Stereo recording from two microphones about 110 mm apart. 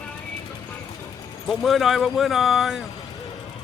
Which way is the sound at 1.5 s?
Centre (ahead or behind).